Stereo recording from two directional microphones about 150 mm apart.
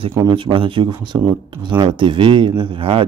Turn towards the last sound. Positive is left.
turn(degrees=-35)  # may be behind; listen again after turning